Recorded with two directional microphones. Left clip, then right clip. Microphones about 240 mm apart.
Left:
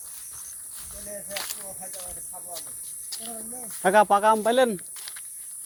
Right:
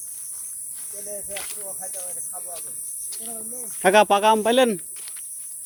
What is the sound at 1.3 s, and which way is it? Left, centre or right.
Speech, left.